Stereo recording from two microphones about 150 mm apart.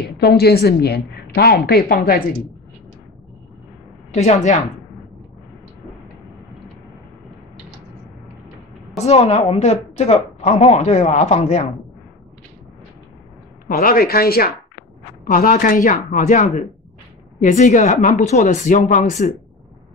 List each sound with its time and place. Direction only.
0.0 s a woman's voice: 90° left
4.1 s a woman's voice: 50° left (ahead or behind)
8.9 s a woman's voice: 45° left (ahead or behind)
13.7 s speech: 80° left
15.3 s speech: 65° left (ahead or behind)